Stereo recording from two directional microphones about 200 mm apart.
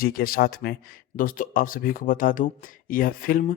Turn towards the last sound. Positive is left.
turn(degrees=45)  # may be behind; listen again after turning